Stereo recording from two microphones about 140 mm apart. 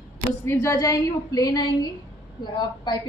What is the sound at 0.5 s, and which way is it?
A woman's voice, 20° left (ahead or behind).